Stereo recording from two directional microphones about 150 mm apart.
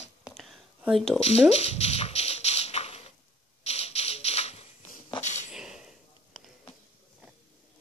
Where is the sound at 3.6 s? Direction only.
45° left (ahead or behind).